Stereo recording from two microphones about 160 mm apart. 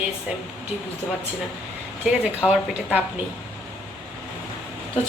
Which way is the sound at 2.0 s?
5° right (ahead or behind).